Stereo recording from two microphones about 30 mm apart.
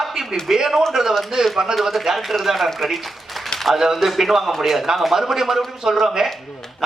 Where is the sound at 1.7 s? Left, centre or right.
Centre.